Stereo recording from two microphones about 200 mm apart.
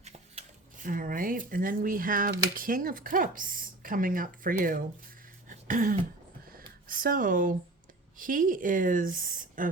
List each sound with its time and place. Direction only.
0.0 s speech: 35° right (ahead or behind)
5.5 s throat clearing: 40° right (ahead or behind)
6.8 s speech: 45° right (ahead or behind)